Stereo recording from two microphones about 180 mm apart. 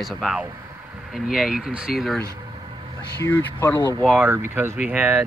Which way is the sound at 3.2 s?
15° left (ahead or behind).